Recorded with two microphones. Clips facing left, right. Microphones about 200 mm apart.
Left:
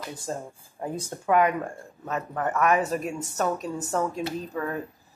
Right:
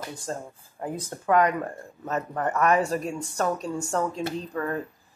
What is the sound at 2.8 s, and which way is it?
Speech, 20° left (ahead or behind).